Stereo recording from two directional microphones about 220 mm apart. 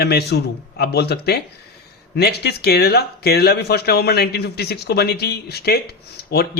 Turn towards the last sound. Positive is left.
turn(degrees=45)  # may be behind; listen again after turning